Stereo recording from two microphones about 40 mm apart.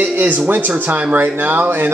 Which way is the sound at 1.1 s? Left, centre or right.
Right.